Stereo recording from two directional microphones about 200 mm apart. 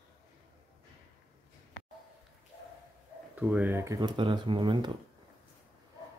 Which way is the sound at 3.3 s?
5° right (ahead or behind).